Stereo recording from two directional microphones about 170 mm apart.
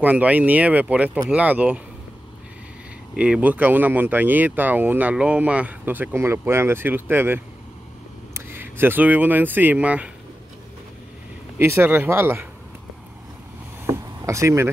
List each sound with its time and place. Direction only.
0.0 s speech: 10° right (ahead or behind)
3.2 s speech: 10° right (ahead or behind)
11.5 s speech: 15° right (ahead or behind)
13.8 s vehicle: 15° right (ahead or behind)